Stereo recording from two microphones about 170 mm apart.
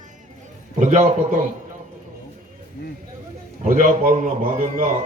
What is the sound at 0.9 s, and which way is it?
Speech, 45° right (ahead or behind).